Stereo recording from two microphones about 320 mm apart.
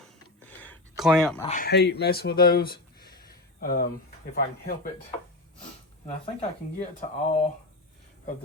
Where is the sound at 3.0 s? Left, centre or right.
Left.